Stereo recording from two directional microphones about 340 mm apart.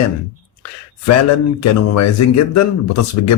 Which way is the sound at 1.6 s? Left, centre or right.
Left.